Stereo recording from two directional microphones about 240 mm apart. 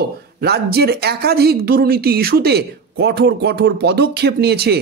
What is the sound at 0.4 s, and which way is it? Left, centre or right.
Speech, right.